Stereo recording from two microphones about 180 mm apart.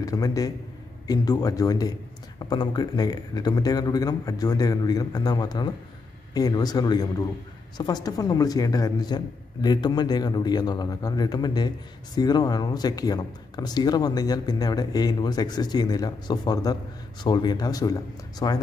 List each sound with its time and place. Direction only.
0.0 s a man's voice: 20° left (ahead or behind)